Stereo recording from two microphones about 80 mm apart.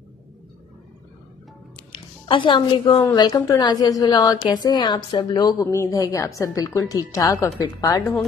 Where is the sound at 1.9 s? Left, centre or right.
Left.